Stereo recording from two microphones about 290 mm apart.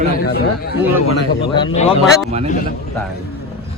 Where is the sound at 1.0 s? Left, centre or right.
Left.